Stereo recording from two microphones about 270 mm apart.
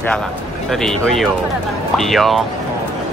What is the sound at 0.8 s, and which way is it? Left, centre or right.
Speech, centre.